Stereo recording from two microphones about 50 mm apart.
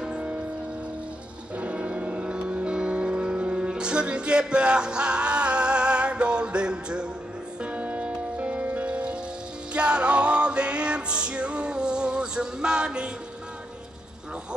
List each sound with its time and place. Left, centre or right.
0.1 s music: right
1.6 s music: right
7.6 s music: right